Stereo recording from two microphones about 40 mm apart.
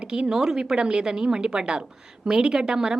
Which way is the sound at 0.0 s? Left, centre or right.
Right.